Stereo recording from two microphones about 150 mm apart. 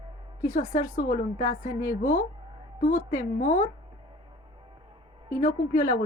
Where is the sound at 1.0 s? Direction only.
65° left (ahead or behind).